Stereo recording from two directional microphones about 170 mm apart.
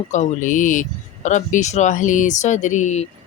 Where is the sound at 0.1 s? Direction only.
45° left (ahead or behind).